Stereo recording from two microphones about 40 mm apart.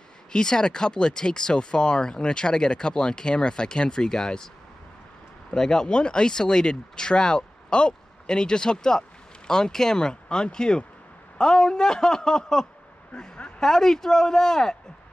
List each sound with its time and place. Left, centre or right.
0.3 s speech: centre
5.5 s speech: centre